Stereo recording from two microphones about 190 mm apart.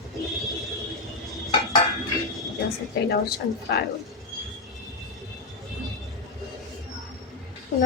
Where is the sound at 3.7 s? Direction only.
60° left (ahead or behind).